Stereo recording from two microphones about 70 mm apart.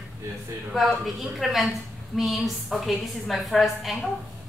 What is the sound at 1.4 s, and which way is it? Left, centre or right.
A woman's voice, centre.